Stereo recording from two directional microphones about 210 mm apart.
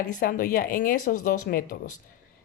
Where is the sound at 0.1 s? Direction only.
40° left (ahead or behind).